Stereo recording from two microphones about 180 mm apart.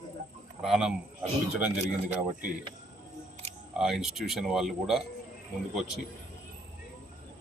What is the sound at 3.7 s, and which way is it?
Speech, 5° right (ahead or behind).